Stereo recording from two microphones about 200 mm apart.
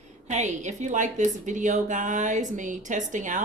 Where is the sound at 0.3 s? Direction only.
35° right (ahead or behind).